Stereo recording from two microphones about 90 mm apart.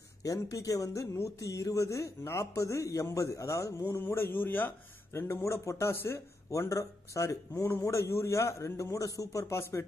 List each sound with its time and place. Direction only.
0.2 s speech: 40° left (ahead or behind)